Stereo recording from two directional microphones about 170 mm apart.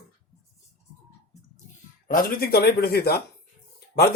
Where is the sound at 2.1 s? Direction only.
60° left (ahead or behind).